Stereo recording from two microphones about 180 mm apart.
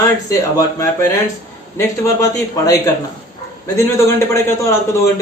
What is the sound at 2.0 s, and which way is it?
Speech, 20° left (ahead or behind).